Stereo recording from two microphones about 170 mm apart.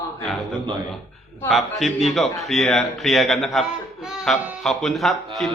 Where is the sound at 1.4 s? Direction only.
Centre (ahead or behind).